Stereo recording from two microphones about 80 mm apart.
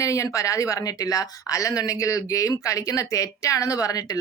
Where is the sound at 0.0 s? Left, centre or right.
Left.